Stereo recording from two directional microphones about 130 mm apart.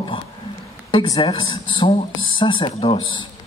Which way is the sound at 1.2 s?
45° left (ahead or behind).